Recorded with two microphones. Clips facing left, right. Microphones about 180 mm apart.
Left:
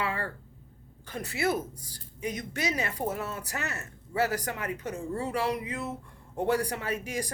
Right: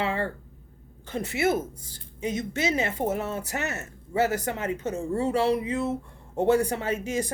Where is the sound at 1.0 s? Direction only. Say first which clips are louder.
Right 4 dB; 25° right (ahead or behind).